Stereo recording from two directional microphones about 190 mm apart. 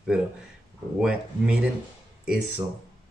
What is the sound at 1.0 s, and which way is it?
Speech, 5° right (ahead or behind).